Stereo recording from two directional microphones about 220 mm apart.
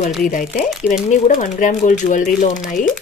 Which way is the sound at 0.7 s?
Centre (ahead or behind).